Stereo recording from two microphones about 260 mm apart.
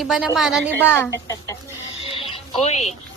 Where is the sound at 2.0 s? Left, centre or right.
Left.